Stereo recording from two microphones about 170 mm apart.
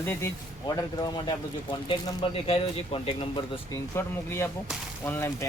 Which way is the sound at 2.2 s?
35° left (ahead or behind).